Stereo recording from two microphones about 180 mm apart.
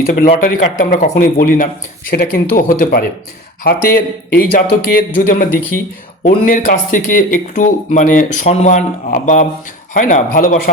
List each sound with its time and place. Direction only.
0.0 s speech: 45° left (ahead or behind)